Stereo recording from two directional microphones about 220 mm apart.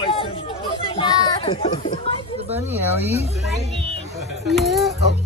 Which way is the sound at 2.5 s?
10° right (ahead or behind).